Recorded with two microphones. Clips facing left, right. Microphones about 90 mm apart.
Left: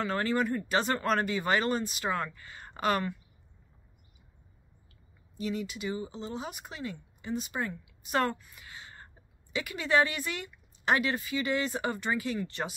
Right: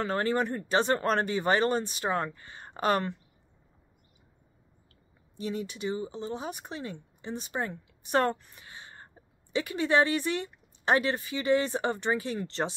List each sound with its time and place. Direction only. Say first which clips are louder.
0.0 s speech: right 1 dB; 35° right (ahead or behind)
5.4 s speech: right 1 dB; 35° right (ahead or behind)